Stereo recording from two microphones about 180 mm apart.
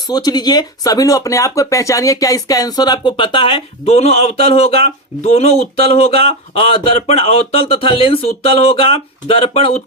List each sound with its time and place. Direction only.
0.1 s speech: 20° left (ahead or behind)